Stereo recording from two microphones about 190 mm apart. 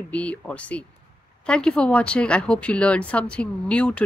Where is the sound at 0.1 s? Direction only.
5° left (ahead or behind).